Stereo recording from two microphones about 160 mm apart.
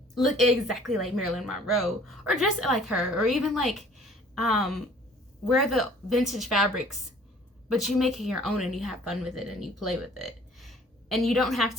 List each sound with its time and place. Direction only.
0.1 s speech: centre (ahead or behind)